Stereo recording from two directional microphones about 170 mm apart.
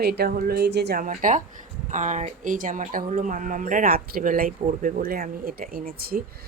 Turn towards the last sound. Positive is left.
turn(degrees=-60)  # may be behind; listen again after turning